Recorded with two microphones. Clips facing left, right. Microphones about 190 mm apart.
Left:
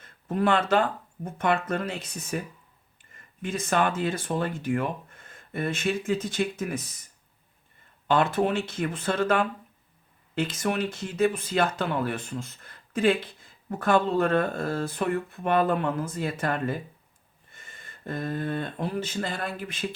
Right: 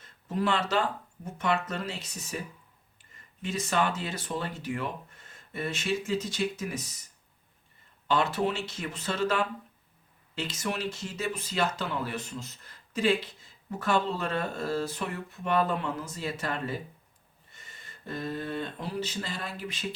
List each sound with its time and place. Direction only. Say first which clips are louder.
0.0 s speech: left 4 dB; 55° left (ahead or behind)
8.0 s speech: left 4 dB; 55° left (ahead or behind)